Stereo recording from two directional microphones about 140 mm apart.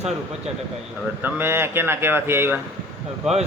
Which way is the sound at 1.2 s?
15° right (ahead or behind).